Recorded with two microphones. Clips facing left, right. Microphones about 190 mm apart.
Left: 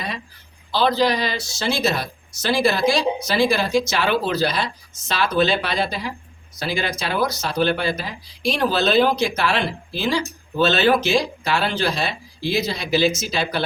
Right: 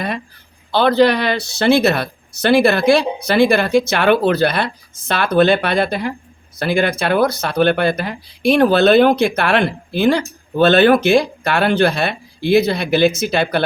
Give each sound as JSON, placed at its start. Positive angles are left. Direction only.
{"t": 0.7, "sound": "speech", "side_deg": -60}